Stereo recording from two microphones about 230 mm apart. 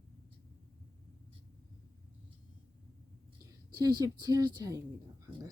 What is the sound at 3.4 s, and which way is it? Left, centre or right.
Speech, centre.